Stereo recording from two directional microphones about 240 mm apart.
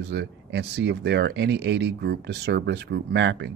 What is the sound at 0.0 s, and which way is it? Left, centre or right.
Speech, right.